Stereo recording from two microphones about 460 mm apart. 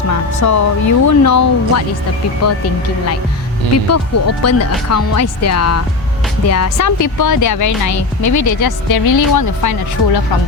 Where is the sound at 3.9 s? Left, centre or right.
Left.